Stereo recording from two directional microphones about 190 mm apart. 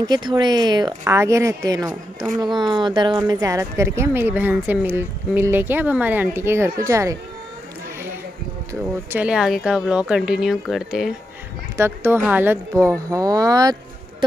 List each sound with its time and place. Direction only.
0.0 s speech: 20° right (ahead or behind)
9.1 s speech: 5° right (ahead or behind)
11.7 s speech: 15° right (ahead or behind)